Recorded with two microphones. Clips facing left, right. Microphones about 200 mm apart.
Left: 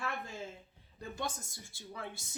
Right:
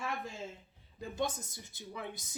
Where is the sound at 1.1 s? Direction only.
20° right (ahead or behind).